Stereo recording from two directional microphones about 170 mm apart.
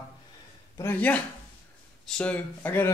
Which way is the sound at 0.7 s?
10° left (ahead or behind).